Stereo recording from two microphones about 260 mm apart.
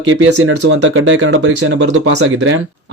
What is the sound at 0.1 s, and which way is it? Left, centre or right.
Speech, right.